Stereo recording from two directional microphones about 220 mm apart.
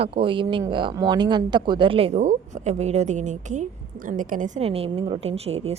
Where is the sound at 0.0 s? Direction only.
25° right (ahead or behind).